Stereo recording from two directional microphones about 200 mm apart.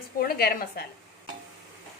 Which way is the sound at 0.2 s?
50° left (ahead or behind).